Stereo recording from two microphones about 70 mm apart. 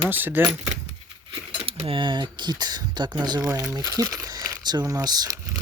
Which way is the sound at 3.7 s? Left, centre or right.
Right.